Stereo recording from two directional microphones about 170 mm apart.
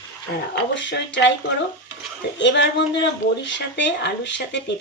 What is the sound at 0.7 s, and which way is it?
Speech, 90° left.